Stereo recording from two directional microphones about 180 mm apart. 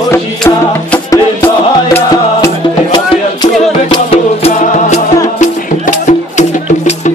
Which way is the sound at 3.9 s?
35° left (ahead or behind).